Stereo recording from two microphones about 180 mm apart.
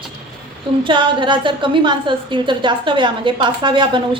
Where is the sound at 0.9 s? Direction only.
25° right (ahead or behind).